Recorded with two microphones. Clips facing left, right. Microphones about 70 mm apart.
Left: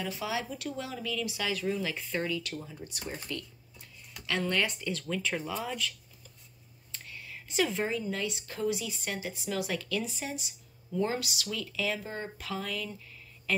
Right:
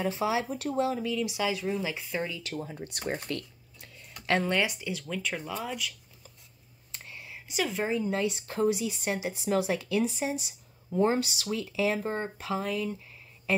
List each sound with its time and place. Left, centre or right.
0.0 s speech: right
2.6 s speech: right
4.3 s speech: right
4.6 s speech: centre
6.9 s whispering: right
7.4 s a woman's voice: centre
7.9 s speech: right
12.0 s speech: right
12.4 s speech: right